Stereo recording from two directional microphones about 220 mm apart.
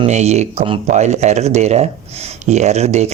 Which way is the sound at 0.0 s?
30° right (ahead or behind).